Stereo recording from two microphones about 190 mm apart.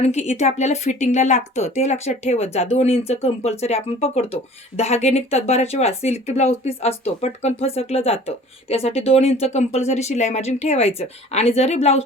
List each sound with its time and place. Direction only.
0.0 s speech: 35° left (ahead or behind)